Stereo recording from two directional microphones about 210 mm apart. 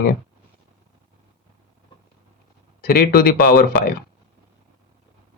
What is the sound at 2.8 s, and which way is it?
Speech, 45° left (ahead or behind).